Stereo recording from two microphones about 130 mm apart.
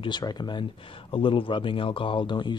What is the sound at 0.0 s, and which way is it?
Speech, 35° left (ahead or behind).